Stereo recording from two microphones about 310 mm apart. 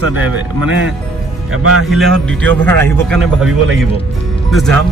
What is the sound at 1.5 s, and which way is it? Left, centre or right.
Speech, right.